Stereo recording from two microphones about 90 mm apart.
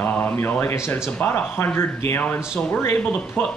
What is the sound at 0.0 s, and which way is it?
Speech, 20° left (ahead or behind).